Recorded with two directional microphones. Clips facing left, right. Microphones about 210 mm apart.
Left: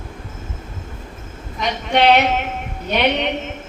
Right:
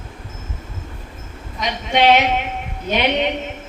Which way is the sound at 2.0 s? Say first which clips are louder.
Even; centre (ahead or behind).